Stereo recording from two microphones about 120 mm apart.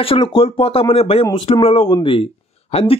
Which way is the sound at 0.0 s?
45° left (ahead or behind).